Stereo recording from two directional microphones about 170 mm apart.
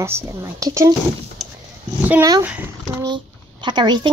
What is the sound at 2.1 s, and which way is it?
Speech, 20° right (ahead or behind).